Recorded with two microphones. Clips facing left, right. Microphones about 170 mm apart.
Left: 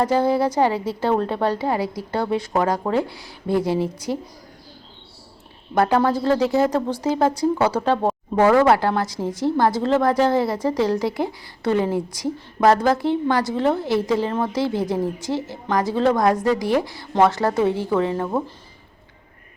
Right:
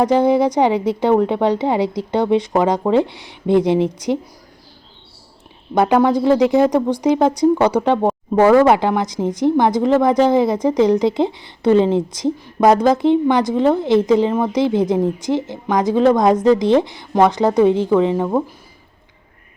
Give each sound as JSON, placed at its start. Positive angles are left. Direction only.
{"t": 0.0, "sound": "speech", "side_deg": -20}
{"t": 5.7, "sound": "speech", "side_deg": -15}